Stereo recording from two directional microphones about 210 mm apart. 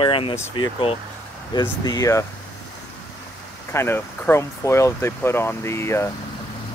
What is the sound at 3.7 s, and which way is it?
Speech, 10° left (ahead or behind).